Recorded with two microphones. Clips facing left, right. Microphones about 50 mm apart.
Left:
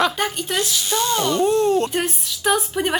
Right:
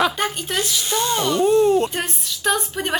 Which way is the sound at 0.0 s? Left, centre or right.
Centre.